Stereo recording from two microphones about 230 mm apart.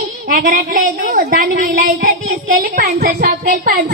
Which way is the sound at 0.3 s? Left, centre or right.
Right.